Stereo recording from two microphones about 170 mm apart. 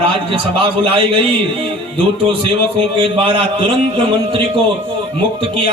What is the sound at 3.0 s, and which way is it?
A man's voice, 30° right (ahead or behind).